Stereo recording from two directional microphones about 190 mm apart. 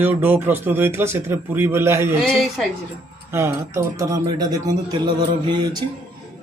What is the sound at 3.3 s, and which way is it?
Speech, 15° right (ahead or behind).